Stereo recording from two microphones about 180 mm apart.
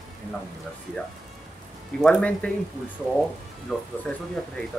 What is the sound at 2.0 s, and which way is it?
Speech, 5° left (ahead or behind).